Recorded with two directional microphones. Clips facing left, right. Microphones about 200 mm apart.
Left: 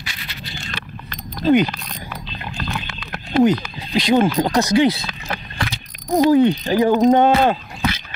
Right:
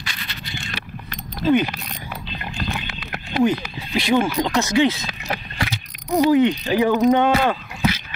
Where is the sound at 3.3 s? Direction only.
40° left (ahead or behind).